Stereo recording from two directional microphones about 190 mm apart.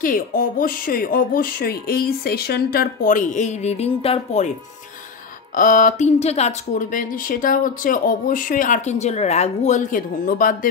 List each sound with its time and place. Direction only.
0.0 s speech: 45° left (ahead or behind)
5.6 s speech: 45° left (ahead or behind)